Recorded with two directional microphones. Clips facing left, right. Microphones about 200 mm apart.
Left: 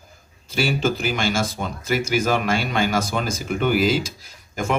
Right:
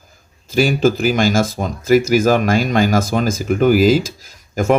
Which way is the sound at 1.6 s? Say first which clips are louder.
Right 10 dB; 40° right (ahead or behind).